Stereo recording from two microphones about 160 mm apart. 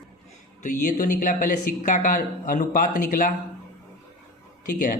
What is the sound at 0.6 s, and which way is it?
Speech, 50° left (ahead or behind).